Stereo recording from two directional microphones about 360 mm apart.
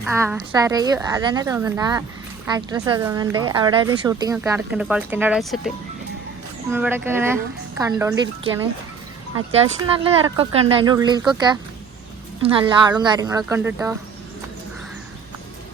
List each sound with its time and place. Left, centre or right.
0.0 s speech: centre